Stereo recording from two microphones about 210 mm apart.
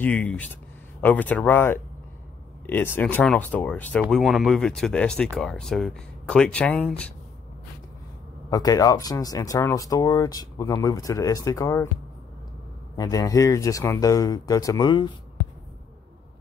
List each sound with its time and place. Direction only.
0.0 s speech: 5° left (ahead or behind)
8.5 s speech: 15° left (ahead or behind)
12.9 s speech: 20° left (ahead or behind)